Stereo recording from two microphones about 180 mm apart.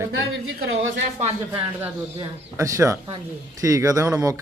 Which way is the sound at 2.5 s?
15° right (ahead or behind).